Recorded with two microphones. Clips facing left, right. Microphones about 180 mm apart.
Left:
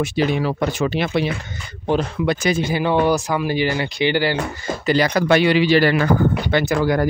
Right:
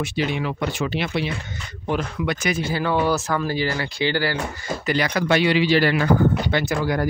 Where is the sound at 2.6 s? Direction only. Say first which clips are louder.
Left 2 dB; 20° left (ahead or behind).